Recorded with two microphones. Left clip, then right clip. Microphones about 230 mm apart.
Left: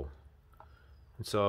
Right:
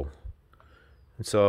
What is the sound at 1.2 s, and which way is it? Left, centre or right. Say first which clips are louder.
Speech: right 8 dB; right.